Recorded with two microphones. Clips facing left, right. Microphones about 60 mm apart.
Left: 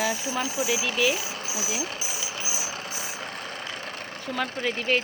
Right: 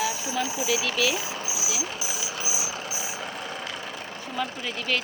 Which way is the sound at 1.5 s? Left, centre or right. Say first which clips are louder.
Left 1 dB; left.